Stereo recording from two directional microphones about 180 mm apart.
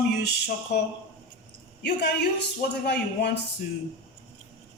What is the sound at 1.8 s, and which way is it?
Speech, 70° left (ahead or behind).